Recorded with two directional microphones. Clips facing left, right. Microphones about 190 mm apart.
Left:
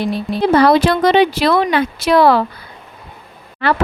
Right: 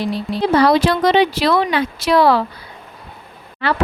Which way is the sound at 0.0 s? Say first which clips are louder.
Left 2 dB; 55° left (ahead or behind).